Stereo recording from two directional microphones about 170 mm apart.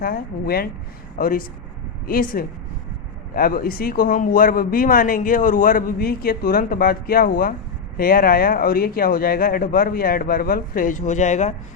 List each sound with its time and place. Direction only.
0.0 s speech: 60° left (ahead or behind); by 11.5 s 45° left (ahead or behind)